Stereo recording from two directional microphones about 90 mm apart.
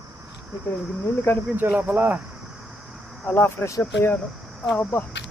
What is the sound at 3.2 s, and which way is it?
Speech, 25° left (ahead or behind).